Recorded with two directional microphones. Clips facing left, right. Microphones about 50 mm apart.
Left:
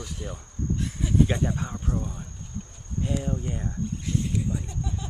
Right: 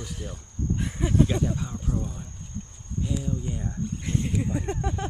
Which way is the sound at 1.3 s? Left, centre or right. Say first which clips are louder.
Even; centre.